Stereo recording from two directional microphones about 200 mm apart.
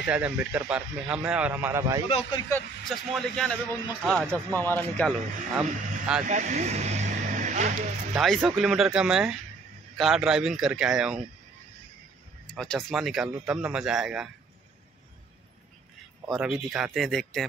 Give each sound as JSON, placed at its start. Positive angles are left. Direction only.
{"t": 0.0, "sound": "a man's voice", "side_deg": -5}
{"t": 2.0, "sound": "speech", "side_deg": 30}
{"t": 2.5, "sound": "speech", "side_deg": 0}
{"t": 5.6, "sound": "speech", "side_deg": -5}
{"t": 6.2, "sound": "speech", "side_deg": -35}
{"t": 8.1, "sound": "speech", "side_deg": 0}
{"t": 12.5, "sound": "speech", "side_deg": 0}
{"t": 16.3, "sound": "speech", "side_deg": 0}